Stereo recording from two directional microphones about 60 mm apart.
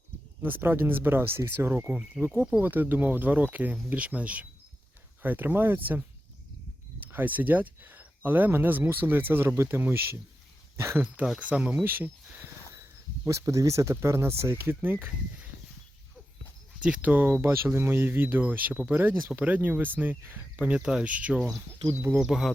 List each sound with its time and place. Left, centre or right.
0.4 s speech: right
2.3 s speech: right
7.1 s speech: right
11.3 s speech: centre
11.8 s speech: right
13.2 s speech: right
16.8 s speech: right
20.7 s speech: centre
22.3 s speech: centre